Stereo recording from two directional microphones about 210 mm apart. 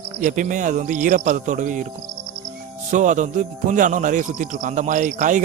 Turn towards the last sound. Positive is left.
turn(degrees=-35)  # may be behind; listen again after turning